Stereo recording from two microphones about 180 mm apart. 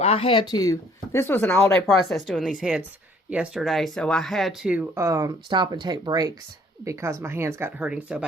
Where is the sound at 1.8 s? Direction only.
Centre (ahead or behind).